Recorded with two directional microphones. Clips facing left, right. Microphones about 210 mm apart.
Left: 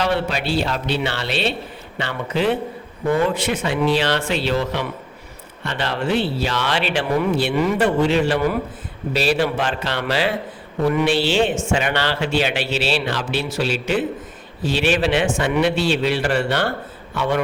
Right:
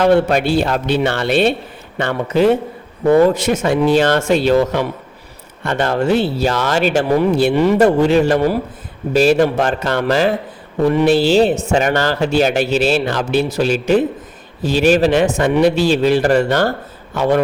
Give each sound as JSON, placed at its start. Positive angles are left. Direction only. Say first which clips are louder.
{"t": 0.0, "sound": "a man's voice", "louder": "right 9 dB", "side_deg": -50}
{"t": 9.1, "sound": "a man's voice", "louder": "right 7 dB", "side_deg": -45}